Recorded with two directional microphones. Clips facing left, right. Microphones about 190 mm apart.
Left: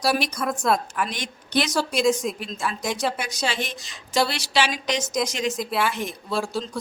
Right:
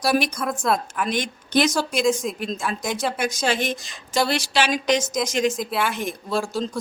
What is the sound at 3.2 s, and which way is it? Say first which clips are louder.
A woman's voice: right 5 dB; 50° right (ahead or behind).